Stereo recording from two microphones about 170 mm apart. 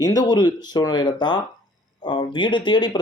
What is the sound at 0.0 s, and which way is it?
Speech, 20° left (ahead or behind).